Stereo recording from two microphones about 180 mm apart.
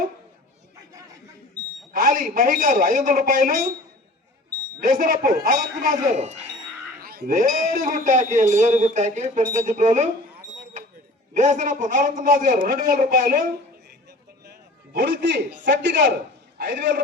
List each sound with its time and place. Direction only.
1.9 s a man's voice: 50° right (ahead or behind)
4.8 s a man's voice: 50° right (ahead or behind)
11.3 s a man's voice: 45° right (ahead or behind)
14.4 s a sound: 65° right (ahead or behind)
15.6 s a man's voice: 80° right